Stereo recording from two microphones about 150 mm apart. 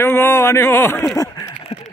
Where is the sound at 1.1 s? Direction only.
20° left (ahead or behind).